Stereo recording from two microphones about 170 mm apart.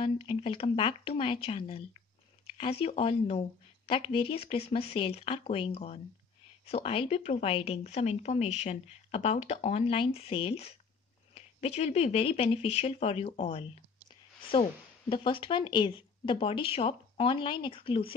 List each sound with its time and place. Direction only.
0.0 s a woman's voice: 30° left (ahead or behind)